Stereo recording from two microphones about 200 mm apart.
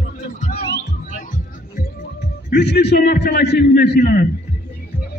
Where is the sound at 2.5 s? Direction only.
55° left (ahead or behind).